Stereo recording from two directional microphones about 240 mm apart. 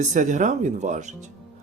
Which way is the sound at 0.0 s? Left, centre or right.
Right.